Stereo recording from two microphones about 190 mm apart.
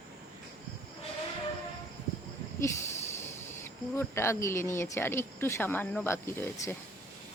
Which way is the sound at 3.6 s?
10° left (ahead or behind).